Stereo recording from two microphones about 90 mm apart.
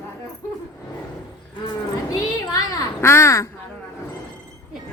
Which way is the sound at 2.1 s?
40° left (ahead or behind).